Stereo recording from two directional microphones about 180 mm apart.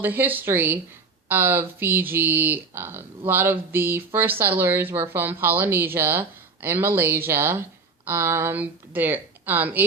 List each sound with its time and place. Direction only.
0.0 s speech: 10° right (ahead or behind)